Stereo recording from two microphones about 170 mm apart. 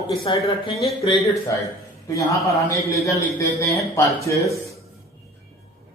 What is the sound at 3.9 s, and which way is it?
Speech, 20° left (ahead or behind).